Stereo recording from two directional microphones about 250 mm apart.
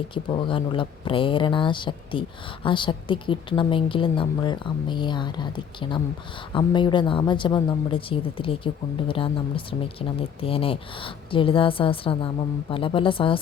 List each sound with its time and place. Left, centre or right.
0.1 s a woman's voice: centre